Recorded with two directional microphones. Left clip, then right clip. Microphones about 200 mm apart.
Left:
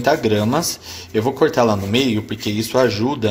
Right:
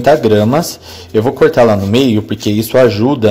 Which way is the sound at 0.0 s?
25° right (ahead or behind).